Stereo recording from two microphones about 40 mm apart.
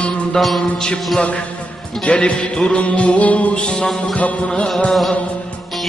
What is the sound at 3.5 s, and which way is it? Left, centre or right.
Music, left.